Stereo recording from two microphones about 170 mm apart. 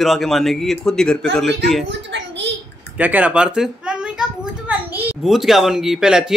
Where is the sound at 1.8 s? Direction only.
90° right.